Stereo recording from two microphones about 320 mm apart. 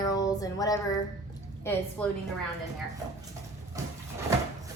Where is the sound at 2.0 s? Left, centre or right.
Centre.